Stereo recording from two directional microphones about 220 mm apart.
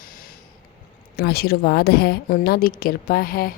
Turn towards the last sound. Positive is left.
turn(degrees=40)  # may be behind; listen again after turning